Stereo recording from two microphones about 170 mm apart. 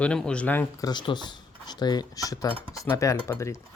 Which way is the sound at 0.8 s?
25° left (ahead or behind).